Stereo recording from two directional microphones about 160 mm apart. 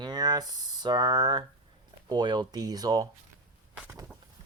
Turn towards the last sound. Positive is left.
turn(degrees=-25)  # may be behind; listen again after turning